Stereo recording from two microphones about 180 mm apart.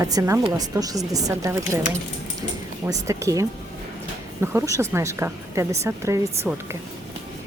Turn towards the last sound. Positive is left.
turn(degrees=-15)  # may be behind; listen again after turning